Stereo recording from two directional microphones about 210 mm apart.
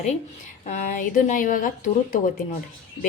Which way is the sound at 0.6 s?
35° left (ahead or behind).